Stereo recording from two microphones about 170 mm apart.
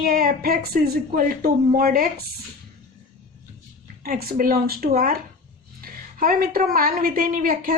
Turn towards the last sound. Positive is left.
turn(degrees=-55)  # may be behind; listen again after turning